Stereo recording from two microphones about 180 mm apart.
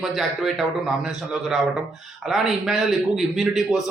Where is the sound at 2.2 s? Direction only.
Centre (ahead or behind).